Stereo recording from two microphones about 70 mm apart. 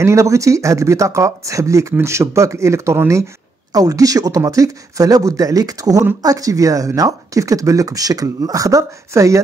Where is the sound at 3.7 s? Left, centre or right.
Right.